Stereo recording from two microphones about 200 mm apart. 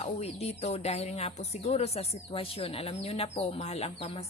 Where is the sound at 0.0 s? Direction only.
30° left (ahead or behind).